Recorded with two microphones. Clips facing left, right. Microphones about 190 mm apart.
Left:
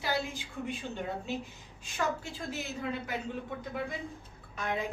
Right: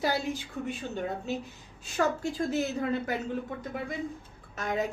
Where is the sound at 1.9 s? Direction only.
45° right (ahead or behind).